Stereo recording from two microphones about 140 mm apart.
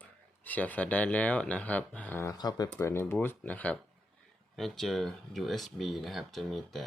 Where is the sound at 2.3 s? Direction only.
30° left (ahead or behind).